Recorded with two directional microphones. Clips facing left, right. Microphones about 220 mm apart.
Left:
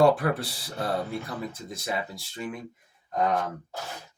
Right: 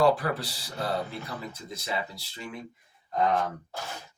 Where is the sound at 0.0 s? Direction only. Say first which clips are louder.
Left 3 dB; 55° left (ahead or behind).